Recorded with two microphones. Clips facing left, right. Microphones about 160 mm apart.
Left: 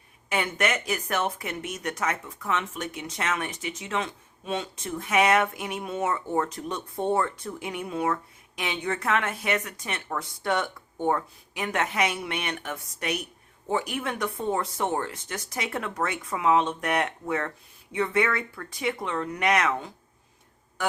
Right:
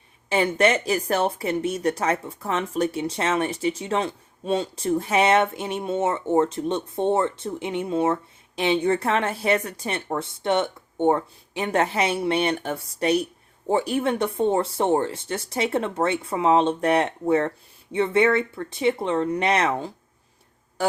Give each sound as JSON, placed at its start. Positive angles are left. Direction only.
{"t": 0.3, "sound": "speech", "side_deg": -30}